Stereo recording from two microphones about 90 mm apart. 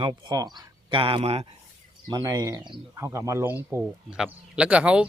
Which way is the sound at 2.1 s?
50° right (ahead or behind).